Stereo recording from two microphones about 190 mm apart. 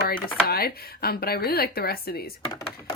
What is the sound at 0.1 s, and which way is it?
Speech, 50° left (ahead or behind).